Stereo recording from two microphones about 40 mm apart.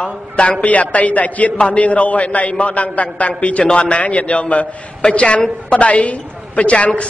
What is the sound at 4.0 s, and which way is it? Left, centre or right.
A man's voice, left.